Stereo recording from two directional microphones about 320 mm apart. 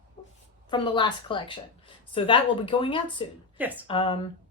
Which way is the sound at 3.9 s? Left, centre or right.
Centre.